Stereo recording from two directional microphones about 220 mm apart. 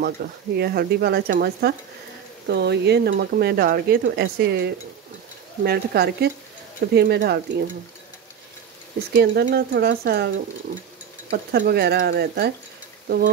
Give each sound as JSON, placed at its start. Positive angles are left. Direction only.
{"t": 0.0, "sound": "speech", "side_deg": -45}
{"t": 9.1, "sound": "speech", "side_deg": -50}